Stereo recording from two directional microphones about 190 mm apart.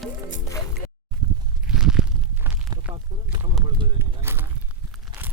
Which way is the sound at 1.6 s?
5° right (ahead or behind).